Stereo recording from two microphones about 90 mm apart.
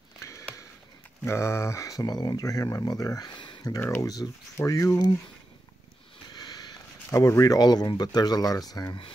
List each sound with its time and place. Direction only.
0.2 s sniff: 30° left (ahead or behind)
1.2 s speech: 30° left (ahead or behind); by 3.6 s 60° left (ahead or behind)
4.0 s speech: 45° left (ahead or behind)
6.3 s sniff: 45° left (ahead or behind)
7.1 s speech: 35° left (ahead or behind)